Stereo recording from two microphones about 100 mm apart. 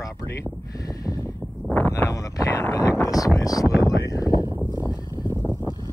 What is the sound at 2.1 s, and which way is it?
Speech, 30° left (ahead or behind).